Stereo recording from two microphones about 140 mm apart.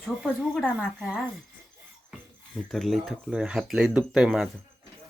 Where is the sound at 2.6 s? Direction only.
Centre (ahead or behind).